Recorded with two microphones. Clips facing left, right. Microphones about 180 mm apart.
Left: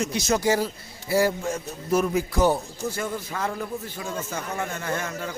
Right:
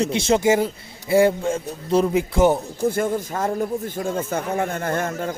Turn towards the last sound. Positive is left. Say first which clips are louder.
# right 6 dB
turn(degrees=-50)  # may be behind; listen again after turning